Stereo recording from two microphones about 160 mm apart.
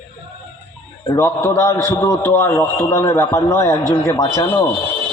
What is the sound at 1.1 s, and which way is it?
A man's voice, 15° left (ahead or behind).